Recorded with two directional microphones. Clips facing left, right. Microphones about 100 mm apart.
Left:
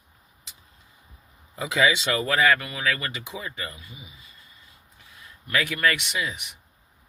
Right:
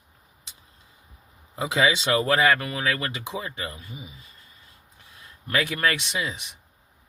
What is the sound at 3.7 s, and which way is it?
Speech, 40° right (ahead or behind).